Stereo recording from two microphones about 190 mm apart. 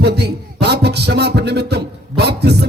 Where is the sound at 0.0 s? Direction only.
60° right (ahead or behind).